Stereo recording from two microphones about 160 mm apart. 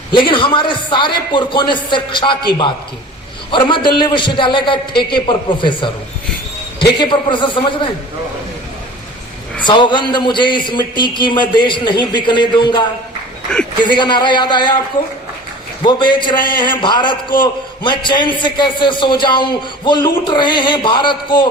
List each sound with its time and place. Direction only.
0.1 s a man's voice: 30° left (ahead or behind)
9.6 s a man's voice: 30° left (ahead or behind)
13.8 s a man's voice: 30° left (ahead or behind)
15.8 s a man's voice: 30° left (ahead or behind)